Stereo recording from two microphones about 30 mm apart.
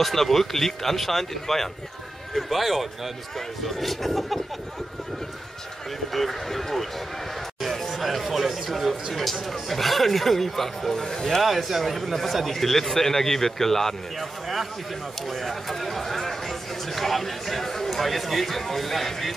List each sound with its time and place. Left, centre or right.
0.0 s speech: centre
6.1 s speech: centre
11.0 s speech: centre
11.4 s speech: centre
12.5 s speech: centre
15.4 s speech: centre